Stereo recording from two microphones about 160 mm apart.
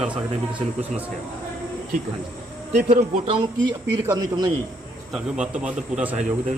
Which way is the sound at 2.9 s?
35° right (ahead or behind).